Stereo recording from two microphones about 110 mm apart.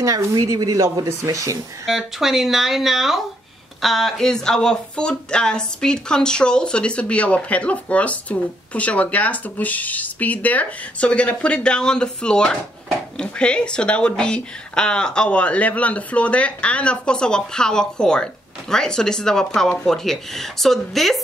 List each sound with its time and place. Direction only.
0.0 s speech: 30° right (ahead or behind)
1.9 s speech: centre (ahead or behind)